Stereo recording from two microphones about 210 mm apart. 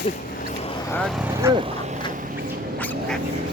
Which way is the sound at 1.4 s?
15° right (ahead or behind).